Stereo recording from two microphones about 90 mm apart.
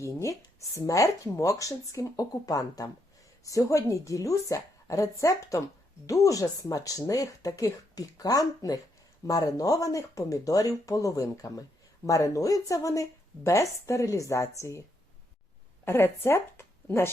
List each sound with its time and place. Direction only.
0.0 s speech: 35° left (ahead or behind)